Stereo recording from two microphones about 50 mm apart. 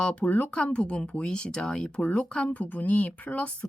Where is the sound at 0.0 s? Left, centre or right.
Left.